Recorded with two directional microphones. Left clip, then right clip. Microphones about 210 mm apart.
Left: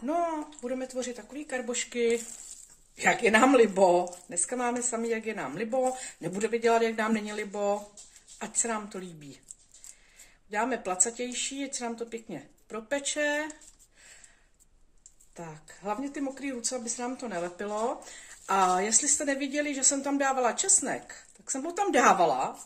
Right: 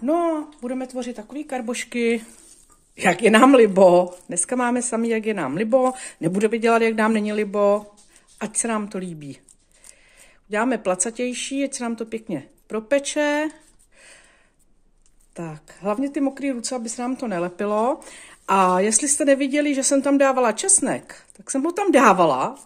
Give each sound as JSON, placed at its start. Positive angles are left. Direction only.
{"t": 0.0, "sound": "speech", "side_deg": -45}
{"t": 10.5, "sound": "speech", "side_deg": -50}
{"t": 15.3, "sound": "speech", "side_deg": -50}